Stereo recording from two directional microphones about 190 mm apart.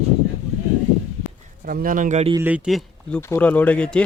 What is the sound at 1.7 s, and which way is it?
Speech, 50° right (ahead or behind).